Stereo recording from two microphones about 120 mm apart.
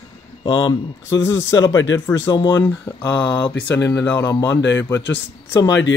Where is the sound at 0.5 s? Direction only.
45° left (ahead or behind).